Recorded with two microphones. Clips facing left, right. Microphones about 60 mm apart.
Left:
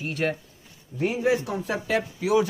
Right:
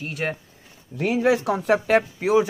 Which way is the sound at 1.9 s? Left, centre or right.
Right.